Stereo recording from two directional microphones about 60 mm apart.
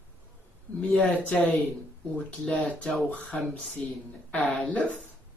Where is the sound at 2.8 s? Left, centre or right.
Centre.